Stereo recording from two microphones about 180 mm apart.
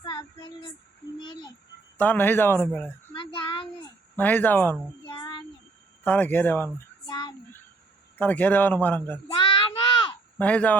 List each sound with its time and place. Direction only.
0.0 s female singing: 25° left (ahead or behind)
1.2 s a sound: 25° left (ahead or behind)
2.0 s speech: 10° left (ahead or behind)
3.2 s child singing: 30° left (ahead or behind)
3.8 s a sound: 10° left (ahead or behind)
5.0 s child singing: 25° left (ahead or behind)
6.1 s speech: 10° left (ahead or behind)
7.1 s child singing: 25° left (ahead or behind)
8.2 s speech: 10° left (ahead or behind)
9.6 s a sound: 25° left (ahead or behind)
10.3 s speech: 5° left (ahead or behind)